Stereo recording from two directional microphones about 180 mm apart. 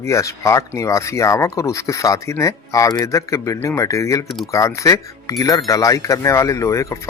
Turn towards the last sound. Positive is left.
turn(degrees=15)  # may be behind; listen again after turning